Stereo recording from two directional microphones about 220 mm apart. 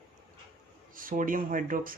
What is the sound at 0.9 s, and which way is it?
Speech, 35° right (ahead or behind).